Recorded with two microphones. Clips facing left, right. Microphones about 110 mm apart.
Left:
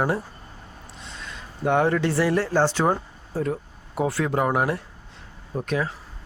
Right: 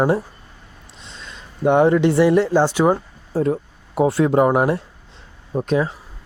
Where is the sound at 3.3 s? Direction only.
30° right (ahead or behind).